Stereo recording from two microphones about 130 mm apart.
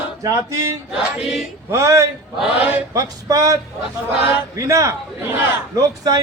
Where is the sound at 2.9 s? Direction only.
25° right (ahead or behind).